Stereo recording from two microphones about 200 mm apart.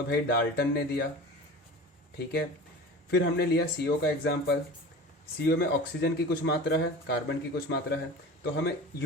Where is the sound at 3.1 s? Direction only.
60° left (ahead or behind).